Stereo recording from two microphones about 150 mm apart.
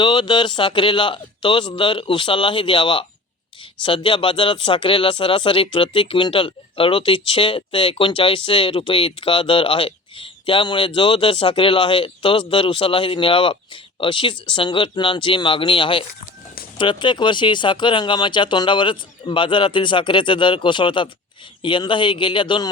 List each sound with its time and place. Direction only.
0.0 s speech: 35° left (ahead or behind)